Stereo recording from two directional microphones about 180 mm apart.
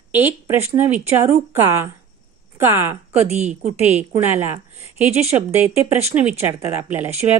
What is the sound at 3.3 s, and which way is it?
Speech, 40° right (ahead or behind).